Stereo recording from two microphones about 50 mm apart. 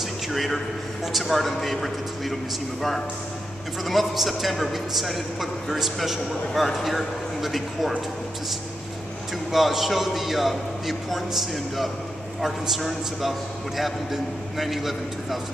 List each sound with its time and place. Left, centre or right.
0.0 s a sound: centre
1.0 s a man's voice: centre
3.8 s a man's voice: centre
9.5 s a man's voice: centre